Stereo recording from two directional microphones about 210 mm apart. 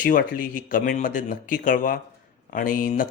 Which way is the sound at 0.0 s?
40° left (ahead or behind).